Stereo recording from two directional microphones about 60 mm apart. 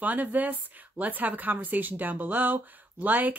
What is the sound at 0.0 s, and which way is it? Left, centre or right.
Speech, right.